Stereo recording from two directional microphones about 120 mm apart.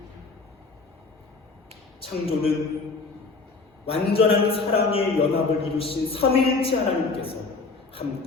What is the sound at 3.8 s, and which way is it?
Speech, 50° left (ahead or behind).